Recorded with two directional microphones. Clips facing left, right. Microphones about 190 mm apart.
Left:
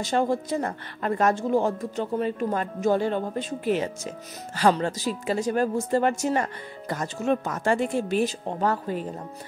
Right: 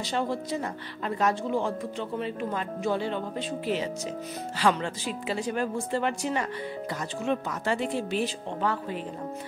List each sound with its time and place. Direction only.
0.0 s speech: 45° left (ahead or behind)